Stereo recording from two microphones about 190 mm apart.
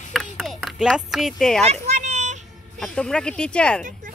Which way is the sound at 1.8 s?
40° right (ahead or behind).